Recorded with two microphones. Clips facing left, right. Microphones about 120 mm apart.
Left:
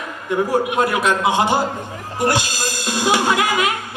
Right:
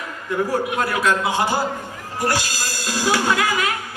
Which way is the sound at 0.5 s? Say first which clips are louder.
Left 4 dB; 20° left (ahead or behind).